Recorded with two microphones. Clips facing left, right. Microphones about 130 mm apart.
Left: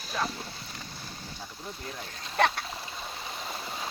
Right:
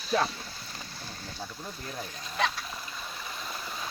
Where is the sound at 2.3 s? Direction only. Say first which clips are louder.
Left 5 dB; 60° left (ahead or behind).